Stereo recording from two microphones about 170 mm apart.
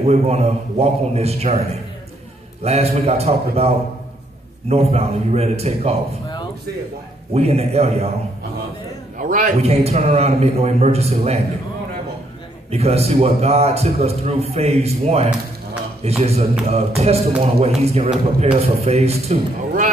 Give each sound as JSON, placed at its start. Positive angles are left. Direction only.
{"t": 0.0, "sound": "a man's voice", "side_deg": -40}
{"t": 2.6, "sound": "a man's voice", "side_deg": -35}
{"t": 7.3, "sound": "a man's voice", "side_deg": -40}
{"t": 9.2, "sound": "a man's voice", "side_deg": -50}
{"t": 12.7, "sound": "a man's voice", "side_deg": -40}